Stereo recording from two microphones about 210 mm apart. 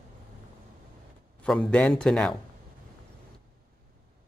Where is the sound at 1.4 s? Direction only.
5° left (ahead or behind).